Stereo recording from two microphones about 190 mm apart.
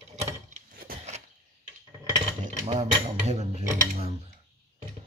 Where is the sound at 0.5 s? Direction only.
50° right (ahead or behind).